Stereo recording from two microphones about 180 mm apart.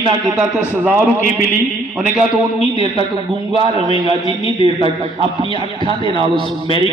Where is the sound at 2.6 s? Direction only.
30° right (ahead or behind).